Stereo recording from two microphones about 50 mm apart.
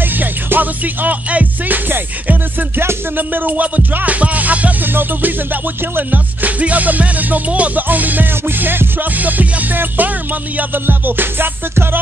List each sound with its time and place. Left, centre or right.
0.2 s music: right
3.2 s music: right
4.9 s music: right